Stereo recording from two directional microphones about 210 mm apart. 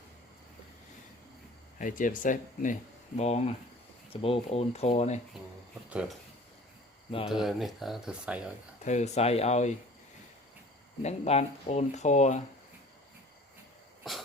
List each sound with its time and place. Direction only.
1.8 s speech: 40° left (ahead or behind)
5.9 s speech: 5° right (ahead or behind)
7.3 s speech: centre (ahead or behind)
8.8 s speech: 35° left (ahead or behind)
11.0 s speech: 30° left (ahead or behind)
14.0 s a sound: centre (ahead or behind)